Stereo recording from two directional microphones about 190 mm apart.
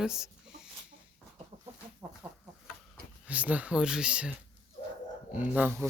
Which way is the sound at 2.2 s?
10° right (ahead or behind).